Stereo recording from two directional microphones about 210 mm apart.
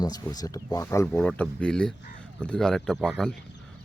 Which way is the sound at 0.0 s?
20° left (ahead or behind).